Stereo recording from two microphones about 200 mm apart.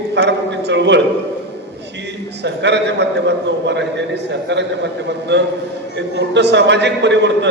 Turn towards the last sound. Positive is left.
turn(degrees=-60)  # may be behind; listen again after turning